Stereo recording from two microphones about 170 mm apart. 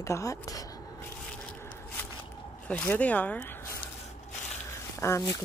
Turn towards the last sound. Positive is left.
turn(degrees=15)  # may be behind; listen again after turning